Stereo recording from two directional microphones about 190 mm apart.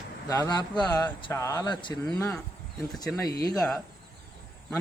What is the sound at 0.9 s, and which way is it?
Speech, 20° left (ahead or behind).